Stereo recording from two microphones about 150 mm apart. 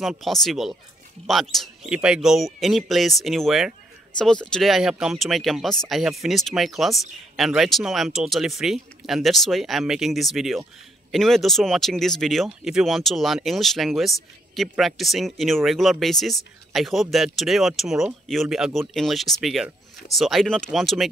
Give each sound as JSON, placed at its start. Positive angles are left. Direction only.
{"t": 0.0, "sound": "speech", "side_deg": 0}